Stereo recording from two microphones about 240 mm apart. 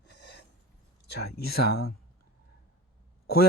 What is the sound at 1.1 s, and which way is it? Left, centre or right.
Speech, left.